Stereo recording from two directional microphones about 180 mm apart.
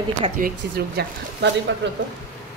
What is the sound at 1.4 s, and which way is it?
Speech, 75° right (ahead or behind).